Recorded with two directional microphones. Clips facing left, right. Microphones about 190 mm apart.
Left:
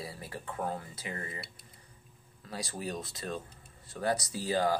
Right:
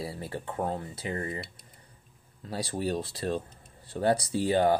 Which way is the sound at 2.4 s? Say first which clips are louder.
Right 7 dB; 30° right (ahead or behind).